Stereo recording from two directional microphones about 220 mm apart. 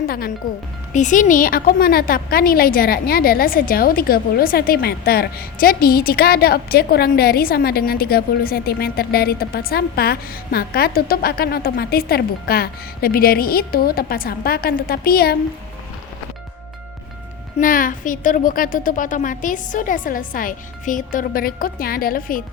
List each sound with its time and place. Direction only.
0.1 s a woman's voice: 45° left (ahead or behind)
17.6 s a woman's voice: 40° left (ahead or behind)